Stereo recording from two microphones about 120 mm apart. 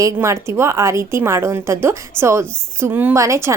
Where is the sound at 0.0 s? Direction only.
25° right (ahead or behind).